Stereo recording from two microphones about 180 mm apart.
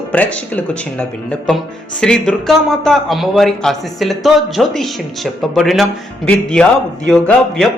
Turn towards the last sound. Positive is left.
turn(degrees=5)  # may be behind; listen again after turning